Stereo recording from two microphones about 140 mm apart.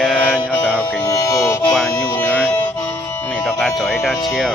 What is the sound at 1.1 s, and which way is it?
Speech, 25° left (ahead or behind).